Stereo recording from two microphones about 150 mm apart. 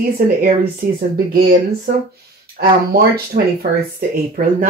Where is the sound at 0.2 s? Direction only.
65° right (ahead or behind).